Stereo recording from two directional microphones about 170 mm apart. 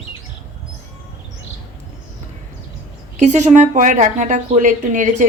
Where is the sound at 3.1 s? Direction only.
45° right (ahead or behind).